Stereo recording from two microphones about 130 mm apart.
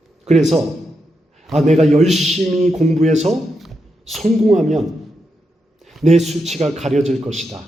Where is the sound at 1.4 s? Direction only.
Centre (ahead or behind).